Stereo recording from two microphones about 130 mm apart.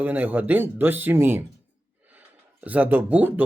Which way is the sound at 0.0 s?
15° right (ahead or behind).